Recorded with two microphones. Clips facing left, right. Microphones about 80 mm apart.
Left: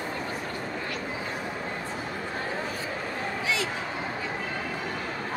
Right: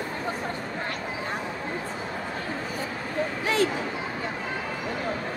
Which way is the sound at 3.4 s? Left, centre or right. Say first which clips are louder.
Right 6 dB; right.